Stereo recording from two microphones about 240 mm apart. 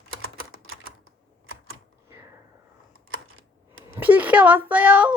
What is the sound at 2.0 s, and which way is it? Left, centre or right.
Finger snapping, centre.